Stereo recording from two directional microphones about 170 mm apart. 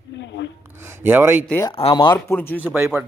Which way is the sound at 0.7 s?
15° right (ahead or behind).